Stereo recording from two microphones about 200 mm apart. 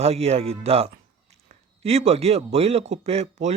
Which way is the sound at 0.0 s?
30° right (ahead or behind).